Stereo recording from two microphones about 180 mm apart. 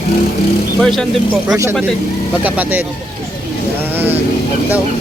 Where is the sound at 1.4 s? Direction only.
15° right (ahead or behind).